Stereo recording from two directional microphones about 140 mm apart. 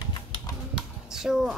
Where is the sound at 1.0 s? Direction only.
5° right (ahead or behind).